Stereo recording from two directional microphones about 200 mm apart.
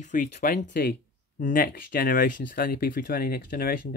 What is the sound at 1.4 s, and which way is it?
Speech, 45° left (ahead or behind).